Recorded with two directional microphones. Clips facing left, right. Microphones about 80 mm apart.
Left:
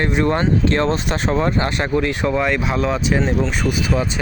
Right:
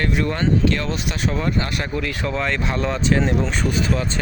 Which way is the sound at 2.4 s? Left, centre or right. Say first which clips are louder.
Left 4 dB; centre.